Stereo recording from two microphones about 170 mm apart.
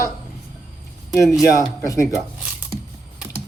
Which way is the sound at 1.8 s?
15° left (ahead or behind).